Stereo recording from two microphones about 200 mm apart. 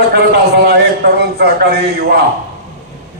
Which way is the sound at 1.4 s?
55° right (ahead or behind).